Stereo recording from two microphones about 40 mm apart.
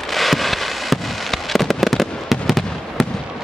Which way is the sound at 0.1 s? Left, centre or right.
Centre.